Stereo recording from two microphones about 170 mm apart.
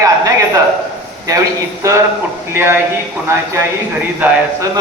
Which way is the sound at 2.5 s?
15° right (ahead or behind).